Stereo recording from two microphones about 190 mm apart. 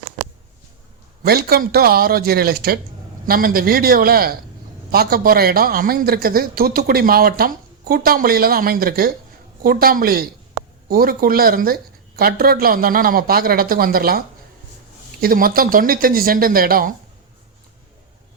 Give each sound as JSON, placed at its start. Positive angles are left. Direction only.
{"t": 1.2, "sound": "a man's voice", "side_deg": -55}